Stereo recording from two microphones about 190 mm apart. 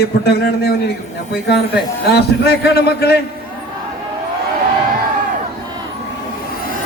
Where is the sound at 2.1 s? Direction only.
60° left (ahead or behind).